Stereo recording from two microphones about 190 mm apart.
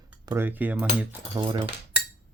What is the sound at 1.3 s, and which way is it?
Speech, 25° right (ahead or behind).